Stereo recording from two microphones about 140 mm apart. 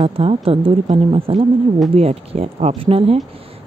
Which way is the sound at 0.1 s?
40° right (ahead or behind).